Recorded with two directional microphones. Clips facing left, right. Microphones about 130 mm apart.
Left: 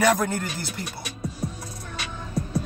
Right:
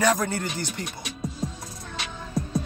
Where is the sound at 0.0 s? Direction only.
10° left (ahead or behind).